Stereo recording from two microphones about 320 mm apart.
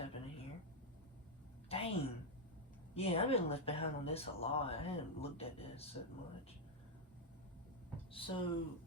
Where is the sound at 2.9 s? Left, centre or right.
Centre.